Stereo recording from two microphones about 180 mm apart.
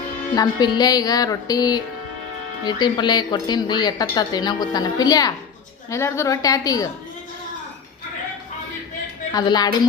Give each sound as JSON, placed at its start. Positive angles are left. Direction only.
{"t": 0.3, "sound": "a woman's voice", "side_deg": 20}
{"t": 9.3, "sound": "a woman's voice", "side_deg": 25}